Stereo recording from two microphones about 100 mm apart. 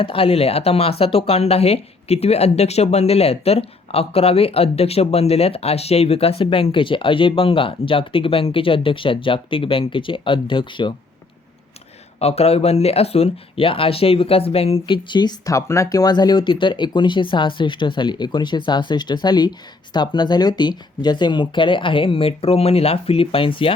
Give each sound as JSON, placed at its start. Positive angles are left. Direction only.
{"t": 0.0, "sound": "speech", "side_deg": 65}
{"t": 12.2, "sound": "speech", "side_deg": 90}
{"t": 14.8, "sound": "speech", "side_deg": 50}
{"t": 15.4, "sound": "speech", "side_deg": 30}